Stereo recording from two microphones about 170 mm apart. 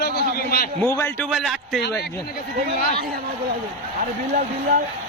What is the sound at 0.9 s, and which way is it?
Speech, 15° left (ahead or behind).